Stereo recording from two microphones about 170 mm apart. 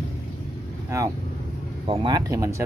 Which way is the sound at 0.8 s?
15° right (ahead or behind).